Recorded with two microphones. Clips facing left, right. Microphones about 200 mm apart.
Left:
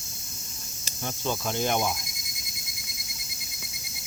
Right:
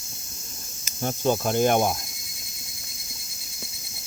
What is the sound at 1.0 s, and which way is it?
Cricket, 45° right (ahead or behind).